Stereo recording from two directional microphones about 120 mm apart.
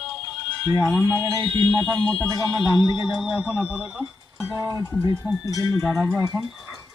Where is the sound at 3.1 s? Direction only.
5° right (ahead or behind).